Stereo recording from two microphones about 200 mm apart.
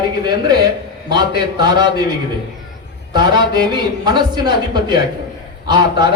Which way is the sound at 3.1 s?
20° right (ahead or behind).